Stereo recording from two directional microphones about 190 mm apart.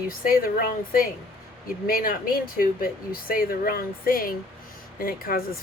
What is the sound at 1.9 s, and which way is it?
Speech, 50° left (ahead or behind).